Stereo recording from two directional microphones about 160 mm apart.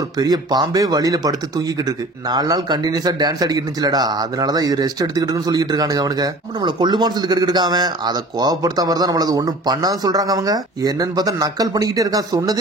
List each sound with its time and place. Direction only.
0.2 s speech: 25° right (ahead or behind)
2.3 s speech: 25° right (ahead or behind)